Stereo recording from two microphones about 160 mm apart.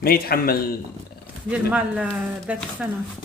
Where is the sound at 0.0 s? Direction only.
70° left (ahead or behind).